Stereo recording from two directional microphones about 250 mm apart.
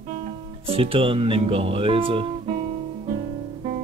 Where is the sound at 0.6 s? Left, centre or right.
Right.